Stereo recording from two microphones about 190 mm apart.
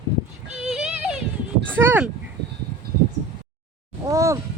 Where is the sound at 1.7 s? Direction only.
10° right (ahead or behind).